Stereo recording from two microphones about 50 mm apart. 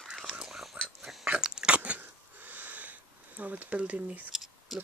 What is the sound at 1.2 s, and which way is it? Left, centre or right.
Biting, centre.